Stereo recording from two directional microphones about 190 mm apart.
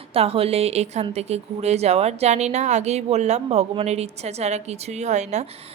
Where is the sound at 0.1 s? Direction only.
30° right (ahead or behind).